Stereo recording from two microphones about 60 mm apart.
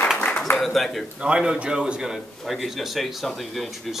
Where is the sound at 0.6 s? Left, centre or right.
Centre.